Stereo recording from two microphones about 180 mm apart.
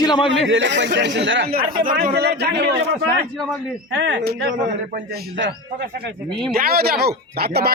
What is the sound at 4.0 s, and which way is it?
Speech, 80° right.